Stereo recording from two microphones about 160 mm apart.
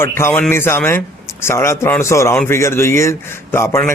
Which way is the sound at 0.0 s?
15° left (ahead or behind).